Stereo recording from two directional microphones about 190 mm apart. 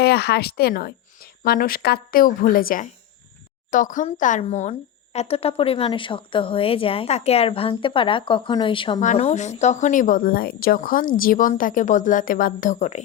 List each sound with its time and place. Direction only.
0.0 s speech: 60° left (ahead or behind); by 9.0 s 25° left (ahead or behind)
9.0 s speech: 35° left (ahead or behind)